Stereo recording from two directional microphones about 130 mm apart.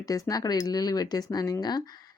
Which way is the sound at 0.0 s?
25° left (ahead or behind).